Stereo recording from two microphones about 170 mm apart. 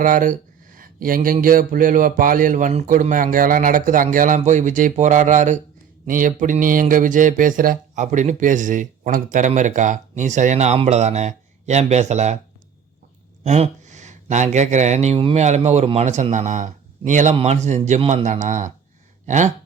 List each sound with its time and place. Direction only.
0.0 s speech: 50° right (ahead or behind)
13.4 s speech: 40° right (ahead or behind)